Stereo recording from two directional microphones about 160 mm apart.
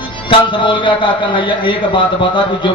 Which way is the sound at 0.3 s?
30° left (ahead or behind).